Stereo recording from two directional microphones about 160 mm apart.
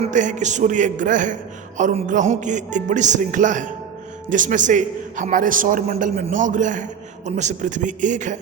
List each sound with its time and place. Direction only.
0.0 s a man's voice: 50° right (ahead or behind)